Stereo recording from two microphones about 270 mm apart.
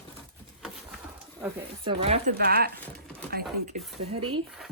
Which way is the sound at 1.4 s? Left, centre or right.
Centre.